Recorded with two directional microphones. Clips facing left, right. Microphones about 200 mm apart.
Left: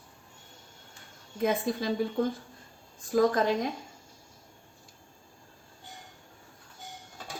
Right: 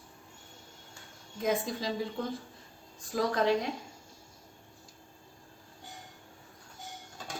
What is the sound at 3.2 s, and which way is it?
Speech, 50° left (ahead or behind).